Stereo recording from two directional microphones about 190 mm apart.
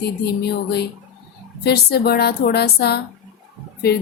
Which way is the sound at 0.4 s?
60° left (ahead or behind).